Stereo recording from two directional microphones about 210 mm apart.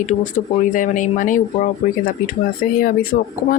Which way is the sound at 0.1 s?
40° left (ahead or behind).